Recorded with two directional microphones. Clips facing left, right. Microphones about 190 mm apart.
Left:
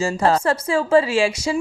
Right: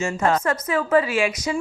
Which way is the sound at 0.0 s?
35° left (ahead or behind).